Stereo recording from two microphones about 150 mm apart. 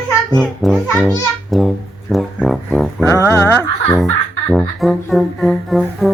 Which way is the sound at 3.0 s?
15° left (ahead or behind).